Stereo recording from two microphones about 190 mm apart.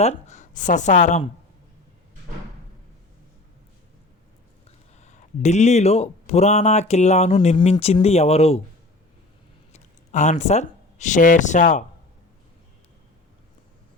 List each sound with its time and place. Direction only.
0.0 s speech: 35° left (ahead or behind)
4.9 s speech: 35° left (ahead or behind)
9.7 s speech: 40° left (ahead or behind)